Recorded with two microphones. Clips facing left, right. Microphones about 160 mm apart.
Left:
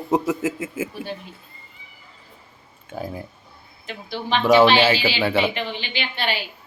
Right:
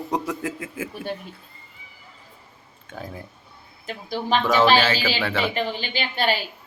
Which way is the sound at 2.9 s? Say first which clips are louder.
Left 5 dB; 10° left (ahead or behind).